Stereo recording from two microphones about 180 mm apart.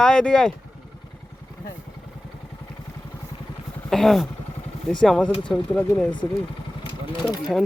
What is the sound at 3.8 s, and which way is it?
Speech, centre (ahead or behind).